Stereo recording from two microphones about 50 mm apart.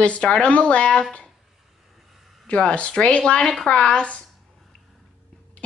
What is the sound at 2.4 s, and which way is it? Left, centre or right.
Speech, left.